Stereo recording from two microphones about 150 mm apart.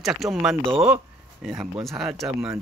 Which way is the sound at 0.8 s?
5° right (ahead or behind).